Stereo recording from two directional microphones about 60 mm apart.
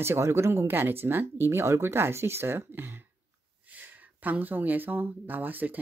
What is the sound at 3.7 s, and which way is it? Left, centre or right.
Speech, right.